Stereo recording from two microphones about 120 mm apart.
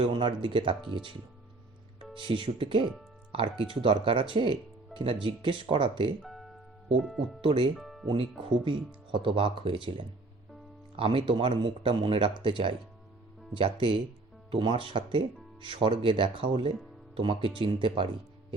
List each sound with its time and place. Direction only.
0.0 s speech: 45° right (ahead or behind)
2.1 s speech: 45° right (ahead or behind)
6.2 s music: centre (ahead or behind)
7.4 s speech: 45° right (ahead or behind)
7.8 s music: centre (ahead or behind)
8.0 s speech: 50° right (ahead or behind)